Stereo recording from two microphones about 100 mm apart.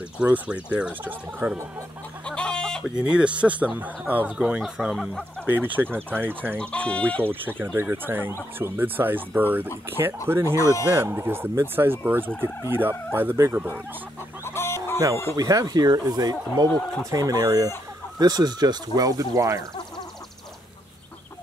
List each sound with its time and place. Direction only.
0.2 s speech: 10° right (ahead or behind)
2.2 s chicken: 10° left (ahead or behind)
3.0 s speech: 10° right (ahead or behind)
4.9 s speech: 5° left (ahead or behind)
5.5 s speech: 20° right (ahead or behind)
6.6 s speech: 15° left (ahead or behind)
7.2 s speech: 20° right (ahead or behind)
14.4 s chicken: 25° left (ahead or behind)
15.3 s speech: 35° right (ahead or behind)